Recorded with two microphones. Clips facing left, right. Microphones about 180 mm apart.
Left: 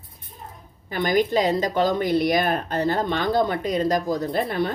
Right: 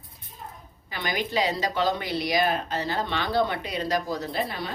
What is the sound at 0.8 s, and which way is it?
A woman's voice, 50° left (ahead or behind).